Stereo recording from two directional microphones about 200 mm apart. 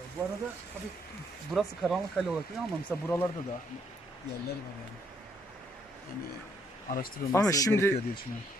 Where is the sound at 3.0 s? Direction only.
10° left (ahead or behind).